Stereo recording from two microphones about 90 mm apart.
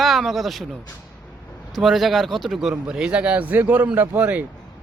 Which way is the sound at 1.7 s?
Centre (ahead or behind).